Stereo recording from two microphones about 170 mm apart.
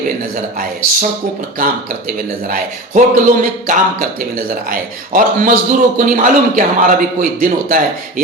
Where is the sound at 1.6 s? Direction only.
55° right (ahead or behind).